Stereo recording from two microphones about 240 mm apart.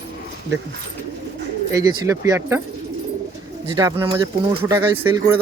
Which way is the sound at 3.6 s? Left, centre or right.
Centre.